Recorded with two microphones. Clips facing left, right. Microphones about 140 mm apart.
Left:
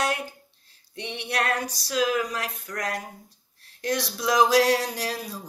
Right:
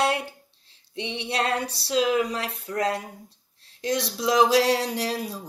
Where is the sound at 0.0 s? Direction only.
30° right (ahead or behind).